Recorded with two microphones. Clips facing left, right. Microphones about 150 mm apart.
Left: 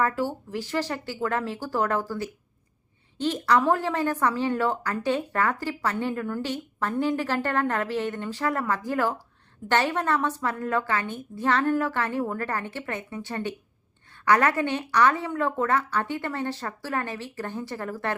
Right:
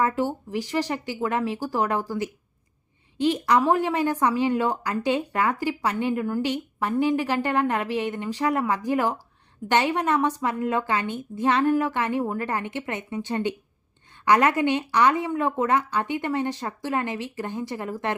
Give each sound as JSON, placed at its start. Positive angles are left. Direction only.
{"t": 0.0, "sound": "a woman's voice", "side_deg": -15}